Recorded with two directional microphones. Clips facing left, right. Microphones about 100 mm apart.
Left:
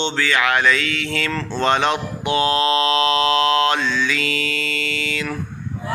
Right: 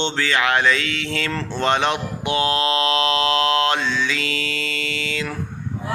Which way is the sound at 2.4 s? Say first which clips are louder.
Left 2 dB; 25° left (ahead or behind).